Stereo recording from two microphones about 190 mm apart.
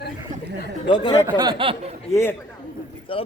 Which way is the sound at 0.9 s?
25° left (ahead or behind).